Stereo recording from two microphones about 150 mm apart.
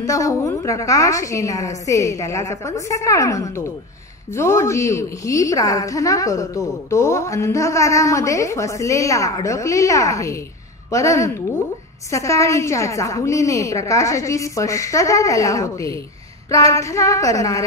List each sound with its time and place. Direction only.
0.0 s a woman's voice: 20° left (ahead or behind)